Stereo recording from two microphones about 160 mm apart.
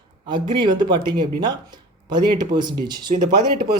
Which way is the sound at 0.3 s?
30° right (ahead or behind).